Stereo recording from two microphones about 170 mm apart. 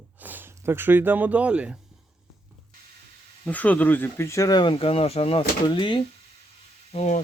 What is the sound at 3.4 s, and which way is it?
Speech, 10° left (ahead or behind).